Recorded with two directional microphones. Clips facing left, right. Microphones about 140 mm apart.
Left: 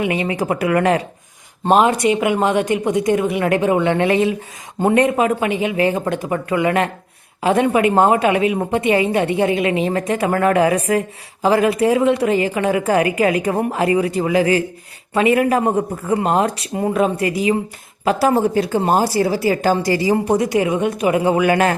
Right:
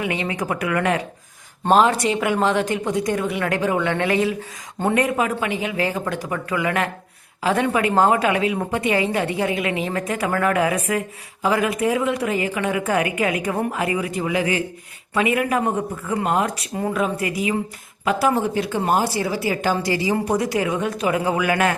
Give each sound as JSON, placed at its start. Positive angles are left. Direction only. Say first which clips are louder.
{"t": 0.0, "sound": "a woman's voice", "louder": "left 5 dB", "side_deg": 25}
{"t": 1.8, "sound": "a woman's voice", "louder": "left 3 dB", "side_deg": 15}
{"t": 20.3, "sound": "a woman's voice", "louder": "left 4 dB", "side_deg": 20}